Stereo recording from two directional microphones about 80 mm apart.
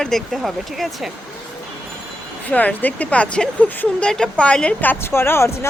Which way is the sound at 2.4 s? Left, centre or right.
Centre.